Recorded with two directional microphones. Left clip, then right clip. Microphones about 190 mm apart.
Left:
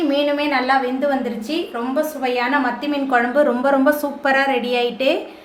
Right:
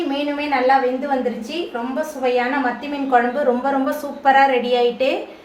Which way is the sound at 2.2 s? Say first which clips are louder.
Right 2 dB; 45° left (ahead or behind).